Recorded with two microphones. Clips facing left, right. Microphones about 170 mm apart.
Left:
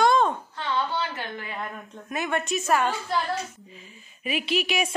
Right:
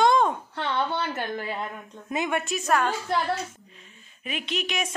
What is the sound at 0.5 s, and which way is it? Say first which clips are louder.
Speech: right 1 dB; 60° right (ahead or behind).